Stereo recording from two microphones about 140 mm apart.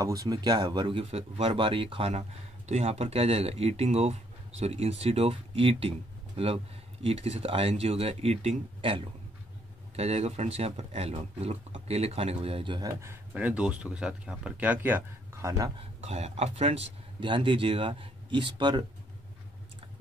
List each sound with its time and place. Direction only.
0.0 s speech: 25° right (ahead or behind)
13.0 s speech: 15° right (ahead or behind)
16.0 s speech: 50° right (ahead or behind); by 18.9 s 30° right (ahead or behind)